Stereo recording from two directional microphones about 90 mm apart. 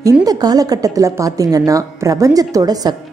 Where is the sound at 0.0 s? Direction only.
45° right (ahead or behind).